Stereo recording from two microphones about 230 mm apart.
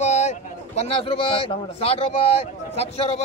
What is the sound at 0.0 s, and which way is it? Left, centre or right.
A man's voice, left.